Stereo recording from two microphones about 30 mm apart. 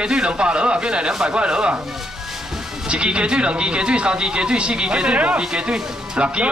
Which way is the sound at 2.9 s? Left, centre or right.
Right.